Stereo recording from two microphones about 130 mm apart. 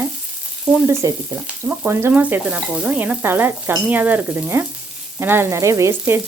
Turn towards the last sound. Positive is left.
turn(degrees=-20)  # may be behind; listen again after turning